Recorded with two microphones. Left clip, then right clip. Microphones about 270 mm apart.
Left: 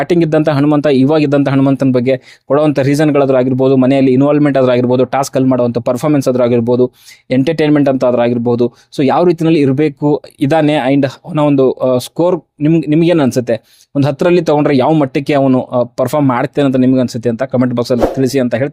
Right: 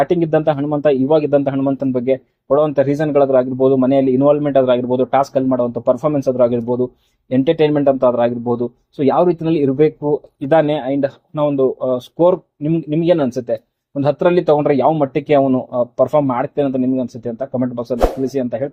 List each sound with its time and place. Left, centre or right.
0.0 s a man's voice: left